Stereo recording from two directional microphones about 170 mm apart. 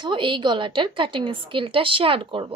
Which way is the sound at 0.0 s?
30° right (ahead or behind).